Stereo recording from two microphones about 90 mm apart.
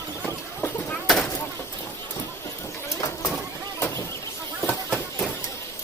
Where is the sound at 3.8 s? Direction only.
30° left (ahead or behind).